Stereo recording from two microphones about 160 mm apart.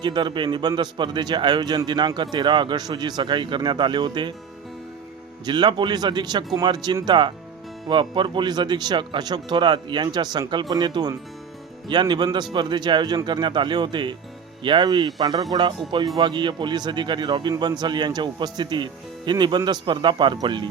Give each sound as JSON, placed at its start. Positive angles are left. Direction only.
{"t": 0.0, "sound": "speech", "side_deg": -30}
{"t": 5.5, "sound": "speech", "side_deg": -25}